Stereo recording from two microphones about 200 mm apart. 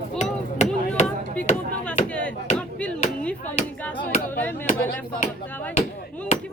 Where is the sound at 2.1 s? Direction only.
5° left (ahead or behind).